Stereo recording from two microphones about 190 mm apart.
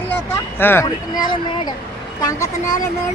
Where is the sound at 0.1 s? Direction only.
10° left (ahead or behind).